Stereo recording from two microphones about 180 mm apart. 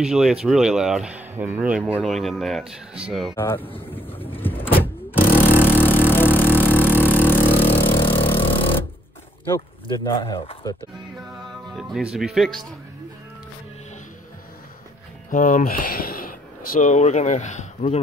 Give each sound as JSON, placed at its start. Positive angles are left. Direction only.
{"t": 0.0, "sound": "speech", "side_deg": -5}
{"t": 3.3, "sound": "speech", "side_deg": 10}
{"t": 3.9, "sound": "vehicle", "side_deg": 10}
{"t": 5.6, "sound": "a sound", "side_deg": 10}
{"t": 7.4, "sound": "vehicle", "side_deg": 30}
{"t": 9.5, "sound": "speech", "side_deg": 20}
{"t": 11.7, "sound": "speech", "side_deg": -5}
{"t": 15.3, "sound": "speech", "side_deg": 45}